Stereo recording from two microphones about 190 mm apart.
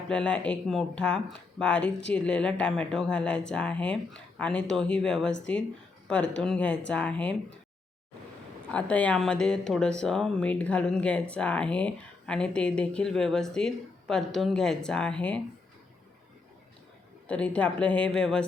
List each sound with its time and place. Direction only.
0.1 s a woman's voice: 5° left (ahead or behind)
8.7 s speech: 5° left (ahead or behind)
17.2 s speech: 5° left (ahead or behind)